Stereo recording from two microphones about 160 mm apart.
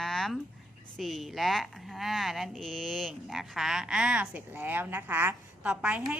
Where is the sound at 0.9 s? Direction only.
Centre (ahead or behind).